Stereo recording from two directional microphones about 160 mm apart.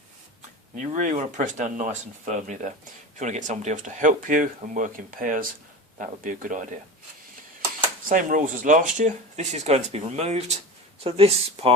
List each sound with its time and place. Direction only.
0.9 s speech: 50° right (ahead or behind)
8.0 s speech: 55° right (ahead or behind); by 11.7 s 40° right (ahead or behind)